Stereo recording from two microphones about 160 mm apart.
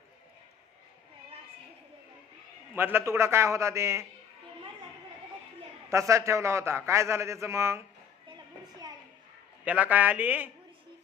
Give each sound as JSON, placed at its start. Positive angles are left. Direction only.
{"t": 2.7, "sound": "a man's voice", "side_deg": -15}
{"t": 5.9, "sound": "a man's voice", "side_deg": -20}
{"t": 9.6, "sound": "a man's voice", "side_deg": -10}